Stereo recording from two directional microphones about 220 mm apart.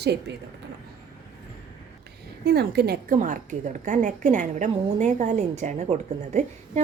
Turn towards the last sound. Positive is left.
turn(degrees=-30)  # may be behind; listen again after turning